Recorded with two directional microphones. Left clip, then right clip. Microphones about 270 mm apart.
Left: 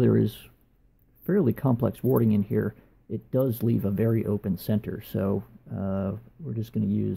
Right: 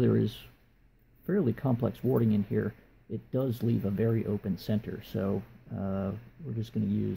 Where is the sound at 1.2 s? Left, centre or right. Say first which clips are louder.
Left 5 dB; centre.